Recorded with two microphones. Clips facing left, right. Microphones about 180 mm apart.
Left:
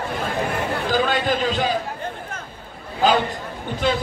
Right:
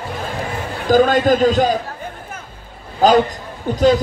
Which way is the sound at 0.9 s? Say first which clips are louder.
Right 10 dB; 45° right (ahead or behind).